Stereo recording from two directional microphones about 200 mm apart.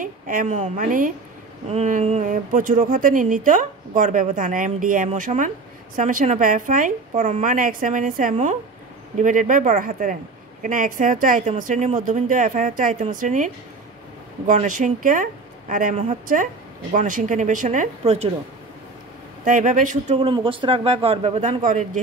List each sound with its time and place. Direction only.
0.0 s speech: 40° right (ahead or behind)
14.5 s speech: 40° right (ahead or behind)
19.4 s speech: 40° right (ahead or behind)